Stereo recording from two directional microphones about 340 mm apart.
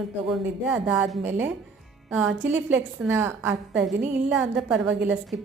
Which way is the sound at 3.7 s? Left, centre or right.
Right.